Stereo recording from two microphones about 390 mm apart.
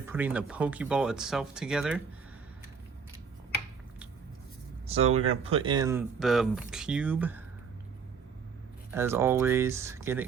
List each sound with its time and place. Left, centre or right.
0.0 s speech: centre
4.9 s speech: centre
8.9 s speech: centre